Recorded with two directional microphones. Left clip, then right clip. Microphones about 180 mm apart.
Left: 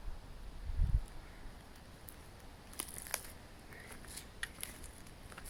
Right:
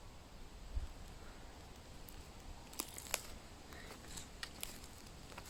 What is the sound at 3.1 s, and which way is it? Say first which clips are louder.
Scissors: right 1 dB; 15° right (ahead or behind).